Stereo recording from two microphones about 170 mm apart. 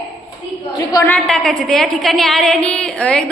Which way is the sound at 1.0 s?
5° left (ahead or behind).